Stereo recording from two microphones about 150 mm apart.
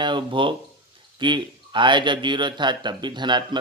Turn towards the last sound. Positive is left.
turn(degrees=-30)  # may be behind; listen again after turning